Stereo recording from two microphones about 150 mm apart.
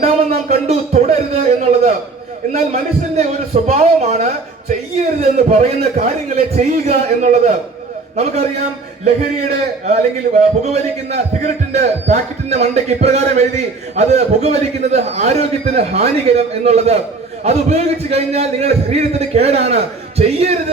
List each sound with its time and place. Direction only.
0.0 s a man's voice: 50° right (ahead or behind)
5.2 s a man's voice: 45° right (ahead or behind)
9.8 s a man's voice: 45° right (ahead or behind)